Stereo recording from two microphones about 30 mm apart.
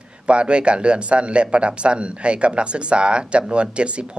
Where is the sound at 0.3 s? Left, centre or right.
Right.